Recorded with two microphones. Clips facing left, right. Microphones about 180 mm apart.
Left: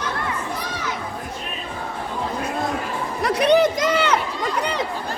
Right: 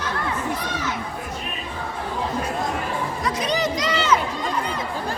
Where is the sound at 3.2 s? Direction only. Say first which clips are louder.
Left 9 dB; 65° left (ahead or behind).